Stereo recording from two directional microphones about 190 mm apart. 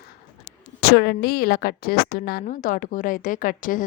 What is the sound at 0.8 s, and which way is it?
A woman's voice, 60° left (ahead or behind).